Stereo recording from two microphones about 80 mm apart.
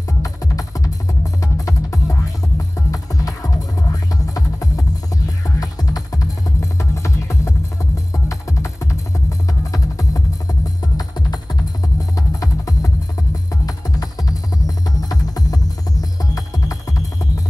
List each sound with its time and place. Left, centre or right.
0.2 s music: left
10.8 s music: left
12.2 s music: left